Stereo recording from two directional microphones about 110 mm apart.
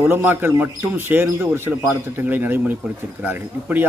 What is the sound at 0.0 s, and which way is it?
A man's voice, 20° right (ahead or behind).